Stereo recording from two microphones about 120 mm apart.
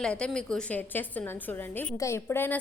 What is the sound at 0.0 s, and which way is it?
A woman's voice, 5° left (ahead or behind).